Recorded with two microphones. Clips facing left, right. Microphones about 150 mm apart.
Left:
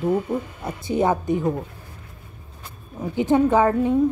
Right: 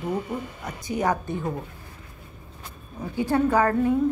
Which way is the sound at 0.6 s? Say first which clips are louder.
Left 4 dB; 25° left (ahead or behind).